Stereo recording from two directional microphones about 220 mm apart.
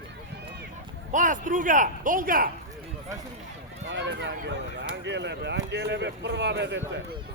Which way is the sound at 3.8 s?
55° right (ahead or behind).